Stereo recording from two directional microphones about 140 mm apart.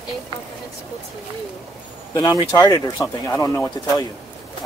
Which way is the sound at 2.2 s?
30° left (ahead or behind).